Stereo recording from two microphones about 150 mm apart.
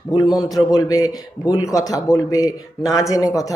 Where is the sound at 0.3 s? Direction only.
25° left (ahead or behind).